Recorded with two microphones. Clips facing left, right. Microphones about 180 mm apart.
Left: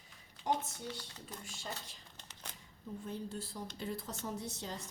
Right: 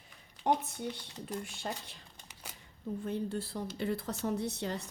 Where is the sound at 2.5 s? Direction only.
10° right (ahead or behind).